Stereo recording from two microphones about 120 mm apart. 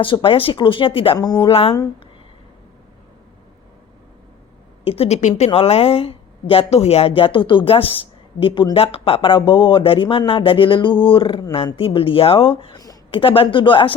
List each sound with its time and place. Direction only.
0.0 s speech: 45° left (ahead or behind)
1.2 s speech: 30° left (ahead or behind)
1.5 s speech: 50° left (ahead or behind)
4.8 s a woman's voice: 55° left (ahead or behind); by 5.5 s 70° left (ahead or behind)
5.5 s speech: 55° left (ahead or behind)